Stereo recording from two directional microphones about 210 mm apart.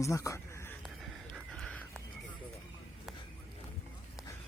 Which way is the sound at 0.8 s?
Centre (ahead or behind).